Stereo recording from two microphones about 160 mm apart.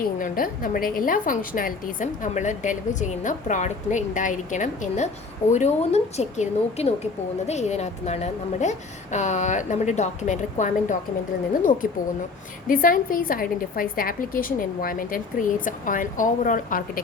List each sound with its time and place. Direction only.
0.0 s a woman's voice: 60° left (ahead or behind)
12.6 s a woman's voice: 60° left (ahead or behind)